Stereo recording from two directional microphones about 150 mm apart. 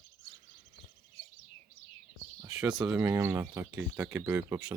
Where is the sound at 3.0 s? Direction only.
20° right (ahead or behind).